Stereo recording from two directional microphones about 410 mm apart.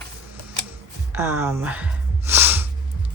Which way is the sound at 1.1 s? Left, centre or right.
Centre.